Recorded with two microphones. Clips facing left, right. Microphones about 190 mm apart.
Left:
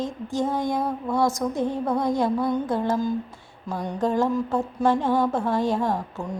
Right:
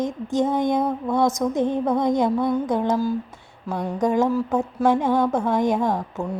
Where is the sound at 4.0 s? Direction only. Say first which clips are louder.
Right 2 dB; 15° right (ahead or behind).